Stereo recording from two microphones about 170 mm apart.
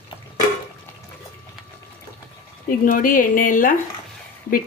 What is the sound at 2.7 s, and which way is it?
Speech, 55° left (ahead or behind).